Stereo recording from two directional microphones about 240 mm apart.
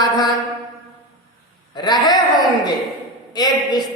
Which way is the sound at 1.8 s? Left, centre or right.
Centre.